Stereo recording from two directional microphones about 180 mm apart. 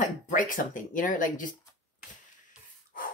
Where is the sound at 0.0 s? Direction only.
45° left (ahead or behind).